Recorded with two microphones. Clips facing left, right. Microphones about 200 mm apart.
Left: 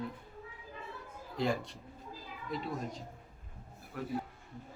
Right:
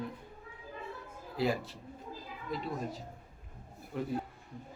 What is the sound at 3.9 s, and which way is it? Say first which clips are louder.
Speech: right 4 dB; 25° right (ahead or behind).